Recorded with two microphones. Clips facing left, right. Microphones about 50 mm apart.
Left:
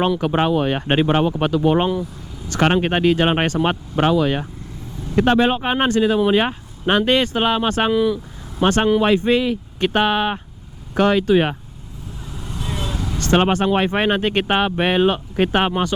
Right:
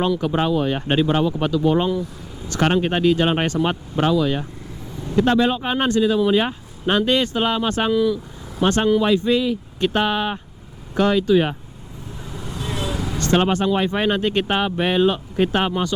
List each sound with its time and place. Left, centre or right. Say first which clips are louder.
0.2 s speech: left 2 dB; left
12.2 s vehicle: even; centre
13.3 s speech: left 2 dB; left